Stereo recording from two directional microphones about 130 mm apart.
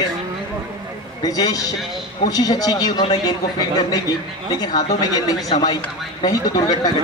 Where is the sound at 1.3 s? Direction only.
30° left (ahead or behind).